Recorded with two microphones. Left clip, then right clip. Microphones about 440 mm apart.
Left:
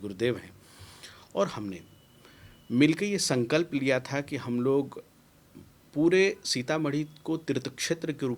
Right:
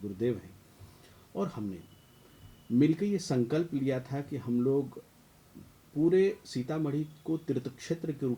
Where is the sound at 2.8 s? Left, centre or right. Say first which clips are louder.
Left 3 dB; left.